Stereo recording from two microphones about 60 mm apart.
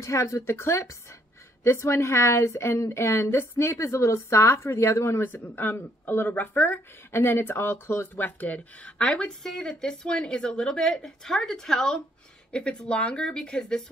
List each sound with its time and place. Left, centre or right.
0.0 s speech: left
5.3 s speech: left
7.1 s speech: left
8.2 s speech: left
9.0 s speech: centre